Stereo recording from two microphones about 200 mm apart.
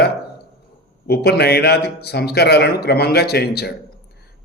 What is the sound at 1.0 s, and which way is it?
A man's voice, 50° left (ahead or behind).